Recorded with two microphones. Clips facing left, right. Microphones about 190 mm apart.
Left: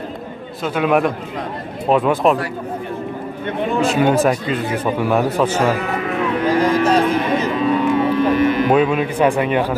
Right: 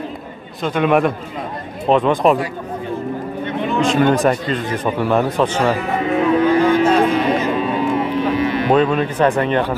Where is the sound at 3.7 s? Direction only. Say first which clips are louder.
Right 1 dB; 5° left (ahead or behind).